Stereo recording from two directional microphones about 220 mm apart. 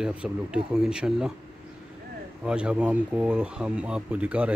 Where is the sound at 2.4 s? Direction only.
5° right (ahead or behind).